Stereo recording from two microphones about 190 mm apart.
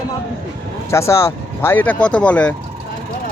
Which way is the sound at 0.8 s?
15° left (ahead or behind).